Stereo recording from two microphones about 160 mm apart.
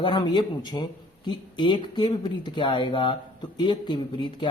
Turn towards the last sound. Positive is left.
turn(degrees=30)  # may be behind; listen again after turning